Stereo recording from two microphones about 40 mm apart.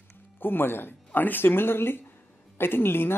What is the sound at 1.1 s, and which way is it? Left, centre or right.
A woman's voice, left.